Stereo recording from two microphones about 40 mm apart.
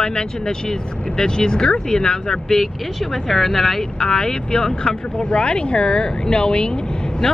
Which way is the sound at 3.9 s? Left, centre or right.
Centre.